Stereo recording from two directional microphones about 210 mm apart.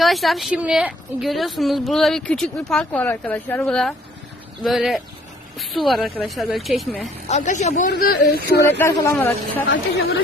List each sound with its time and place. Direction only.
0.0 s a woman's voice: centre (ahead or behind)
7.3 s speech: 35° left (ahead or behind)
7.9 s speech: 50° left (ahead or behind)
8.8 s speech: 15° left (ahead or behind)